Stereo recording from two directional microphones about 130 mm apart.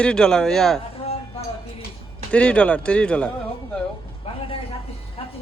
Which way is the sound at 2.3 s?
10° left (ahead or behind).